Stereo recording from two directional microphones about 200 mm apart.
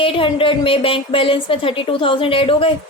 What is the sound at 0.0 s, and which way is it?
A woman's voice, 25° left (ahead or behind).